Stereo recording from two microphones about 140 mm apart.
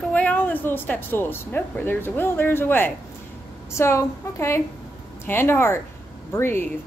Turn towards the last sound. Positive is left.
turn(degrees=15)  # may be behind; listen again after turning